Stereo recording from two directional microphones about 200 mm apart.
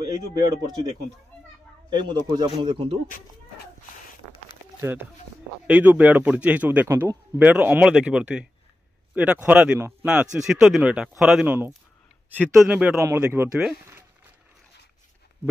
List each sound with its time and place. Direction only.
0.7 s speech: 20° right (ahead or behind)
4.7 s a man's voice: 10° right (ahead or behind)